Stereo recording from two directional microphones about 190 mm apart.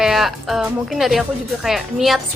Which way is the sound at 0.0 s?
Centre (ahead or behind).